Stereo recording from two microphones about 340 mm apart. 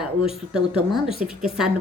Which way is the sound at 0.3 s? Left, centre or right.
Centre.